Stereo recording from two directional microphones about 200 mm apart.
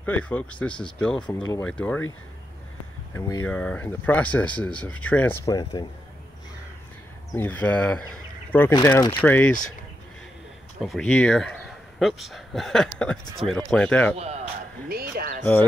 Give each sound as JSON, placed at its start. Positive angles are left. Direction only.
{"t": 0.0, "sound": "speech", "side_deg": 5}
{"t": 3.1, "sound": "speech", "side_deg": 15}
{"t": 7.3, "sound": "speech", "side_deg": 10}
{"t": 10.8, "sound": "speech", "side_deg": 0}
{"t": 14.1, "sound": "a man's voice", "side_deg": -30}
{"t": 14.9, "sound": "a sound", "side_deg": -50}